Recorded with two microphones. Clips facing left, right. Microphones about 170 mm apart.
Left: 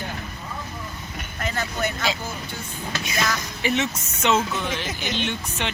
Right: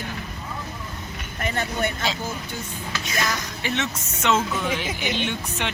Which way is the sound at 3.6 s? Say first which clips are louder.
Left 4 dB; 5° left (ahead or behind).